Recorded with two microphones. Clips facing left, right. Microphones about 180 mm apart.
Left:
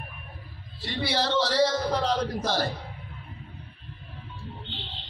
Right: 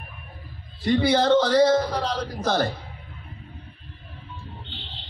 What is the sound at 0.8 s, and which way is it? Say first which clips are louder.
Speech: right 9 dB; 50° right (ahead or behind).